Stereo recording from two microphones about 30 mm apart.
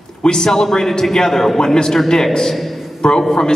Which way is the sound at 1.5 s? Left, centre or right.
Left.